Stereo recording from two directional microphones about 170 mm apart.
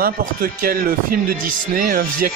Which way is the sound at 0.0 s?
60° right (ahead or behind).